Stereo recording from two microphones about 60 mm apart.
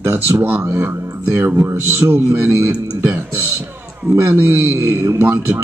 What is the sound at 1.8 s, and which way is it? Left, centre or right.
Speech, right.